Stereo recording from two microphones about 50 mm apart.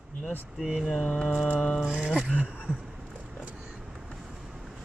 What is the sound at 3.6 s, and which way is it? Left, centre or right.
Vehicle, centre.